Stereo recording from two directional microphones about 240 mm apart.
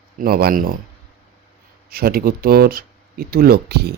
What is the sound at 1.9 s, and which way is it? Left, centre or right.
Speech, right.